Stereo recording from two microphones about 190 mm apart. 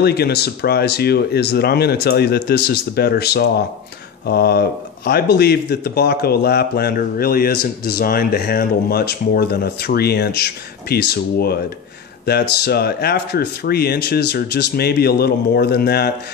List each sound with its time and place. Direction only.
0.0 s speech: 60° left (ahead or behind)